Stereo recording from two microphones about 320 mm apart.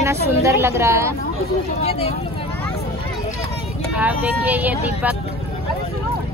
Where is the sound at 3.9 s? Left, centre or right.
Centre.